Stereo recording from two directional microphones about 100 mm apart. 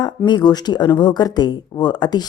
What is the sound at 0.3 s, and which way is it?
A woman's voice, 45° left (ahead or behind).